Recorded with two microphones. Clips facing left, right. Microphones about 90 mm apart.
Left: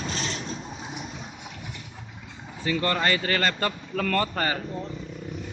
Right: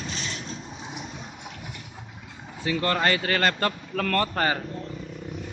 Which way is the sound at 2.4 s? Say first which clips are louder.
Even; 5° right (ahead or behind).